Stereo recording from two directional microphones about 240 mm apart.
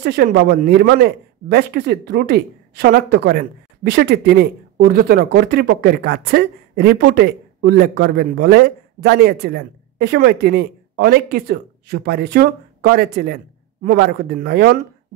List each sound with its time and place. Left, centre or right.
0.0 s a man's voice: right